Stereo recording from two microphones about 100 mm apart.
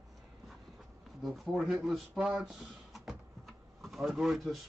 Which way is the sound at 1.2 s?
Centre (ahead or behind).